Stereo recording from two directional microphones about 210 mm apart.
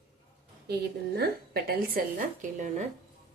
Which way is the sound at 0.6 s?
50° right (ahead or behind).